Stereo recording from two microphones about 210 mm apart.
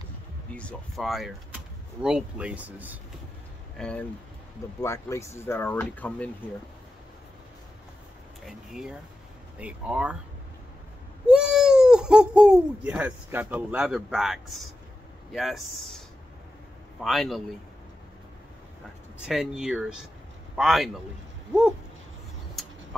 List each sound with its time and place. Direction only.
0.6 s speech: 5° left (ahead or behind)
3.7 s speech: 5° left (ahead or behind)
4.7 s speech: 15° left (ahead or behind)
8.5 s speech: centre (ahead or behind)
11.2 s speech: 5° right (ahead or behind)
17.0 s speech: centre (ahead or behind)
19.2 s speech: 5° right (ahead or behind)